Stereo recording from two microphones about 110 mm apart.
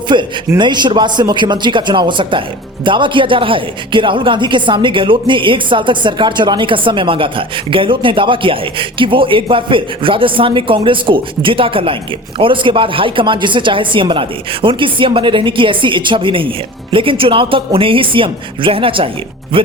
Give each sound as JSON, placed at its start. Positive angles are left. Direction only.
{"t": 0.1, "sound": "a man's voice", "side_deg": -45}